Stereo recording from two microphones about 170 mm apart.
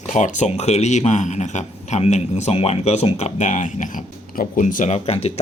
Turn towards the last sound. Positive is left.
turn(degrees=35)  # may be behind; listen again after turning